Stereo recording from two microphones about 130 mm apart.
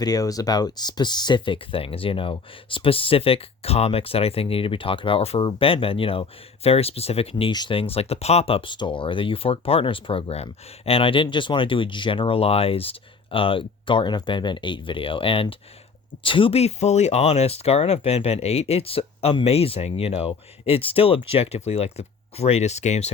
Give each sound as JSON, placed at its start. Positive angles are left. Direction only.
{"t": 0.0, "sound": "speech", "side_deg": 30}
{"t": 7.5, "sound": "speech", "side_deg": 35}
{"t": 7.8, "sound": "speech", "side_deg": 50}